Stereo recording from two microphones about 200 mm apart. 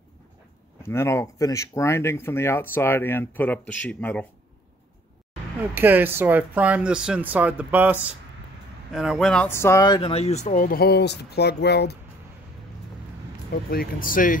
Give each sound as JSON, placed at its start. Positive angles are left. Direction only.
{"t": 0.8, "sound": "speech", "side_deg": 15}
{"t": 5.8, "sound": "speech", "side_deg": -10}
{"t": 13.5, "sound": "speech", "side_deg": 50}